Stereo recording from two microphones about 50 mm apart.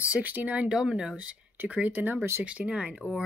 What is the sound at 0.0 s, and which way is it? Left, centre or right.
Speech, right.